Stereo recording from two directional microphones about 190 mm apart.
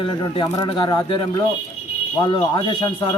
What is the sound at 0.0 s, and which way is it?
A man's voice, 25° left (ahead or behind).